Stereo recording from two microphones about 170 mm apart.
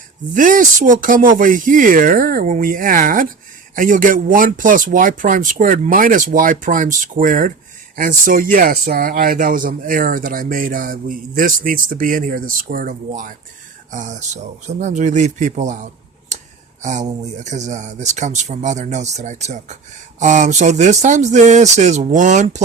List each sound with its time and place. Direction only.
0.3 s speech: 50° right (ahead or behind)
16.3 s a sound: 45° right (ahead or behind)
16.8 s speech: 45° right (ahead or behind)